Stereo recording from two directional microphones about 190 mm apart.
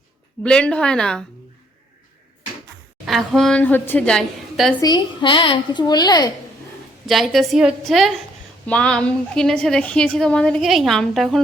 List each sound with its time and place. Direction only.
0.4 s a woman's voice: 5° left (ahead or behind)
3.1 s a woman's voice: centre (ahead or behind)
4.8 s a woman's voice: 20° left (ahead or behind)
7.1 s a woman's voice: centre (ahead or behind)